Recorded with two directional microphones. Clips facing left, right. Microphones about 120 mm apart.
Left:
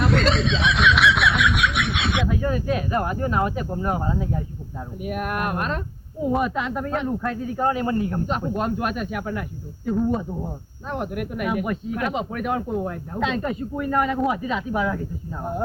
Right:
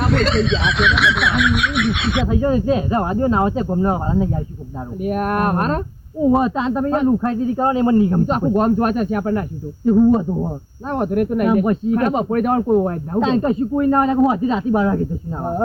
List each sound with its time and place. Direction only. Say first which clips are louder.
0.0 s speech: right 3 dB; centre (ahead or behind)
2.2 s speech: right 7 dB; 30° right (ahead or behind)
5.0 s speech: right 7 dB; 40° right (ahead or behind)
6.3 s speech: right 3 dB; 30° right (ahead or behind)
8.3 s speech: right 8 dB; 40° right (ahead or behind)
13.1 s speech: right 8 dB; 35° right (ahead or behind)